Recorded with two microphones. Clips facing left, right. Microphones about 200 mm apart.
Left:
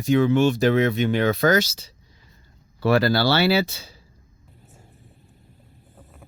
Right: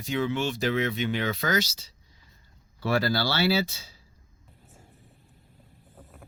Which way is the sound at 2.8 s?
70° left (ahead or behind).